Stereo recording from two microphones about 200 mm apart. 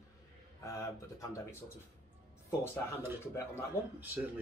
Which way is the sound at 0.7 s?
15° left (ahead or behind).